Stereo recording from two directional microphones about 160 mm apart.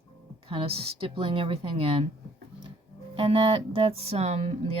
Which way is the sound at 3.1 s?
35° right (ahead or behind).